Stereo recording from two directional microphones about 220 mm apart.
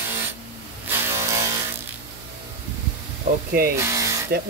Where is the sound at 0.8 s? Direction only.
10° right (ahead or behind).